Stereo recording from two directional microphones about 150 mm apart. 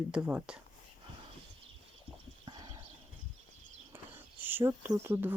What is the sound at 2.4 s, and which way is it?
Horse, 30° right (ahead or behind).